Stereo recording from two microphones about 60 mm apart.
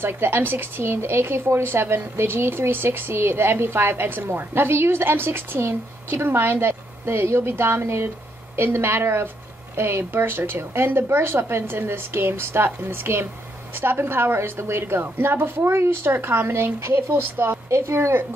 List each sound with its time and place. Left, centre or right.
0.0 s a woman's voice: right
17.6 s a woman's voice: right